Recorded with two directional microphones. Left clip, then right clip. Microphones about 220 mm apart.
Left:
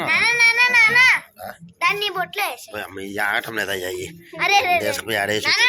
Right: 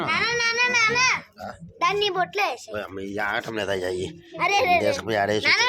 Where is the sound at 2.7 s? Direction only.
Centre (ahead or behind); by 4.2 s 20° right (ahead or behind).